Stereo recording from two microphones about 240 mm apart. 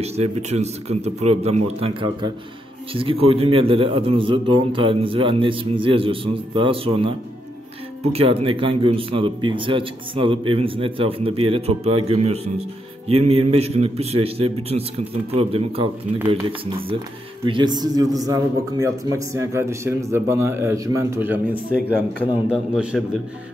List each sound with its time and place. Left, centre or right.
0.0 s speech: right
2.9 s a man's voice: right; by 23.0 s centre